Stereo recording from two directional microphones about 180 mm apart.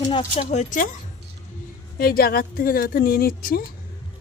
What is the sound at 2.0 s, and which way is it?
Speech, 55° left (ahead or behind).